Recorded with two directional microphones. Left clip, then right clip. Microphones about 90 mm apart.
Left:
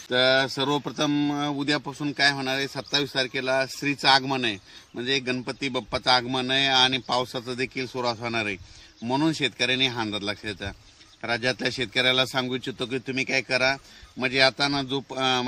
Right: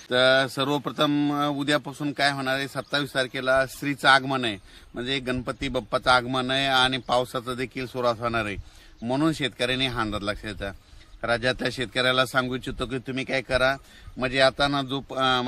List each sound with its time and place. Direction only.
0.1 s speech: 30° right (ahead or behind)
10.7 s speech: 25° right (ahead or behind)
13.0 s speech: 25° right (ahead or behind)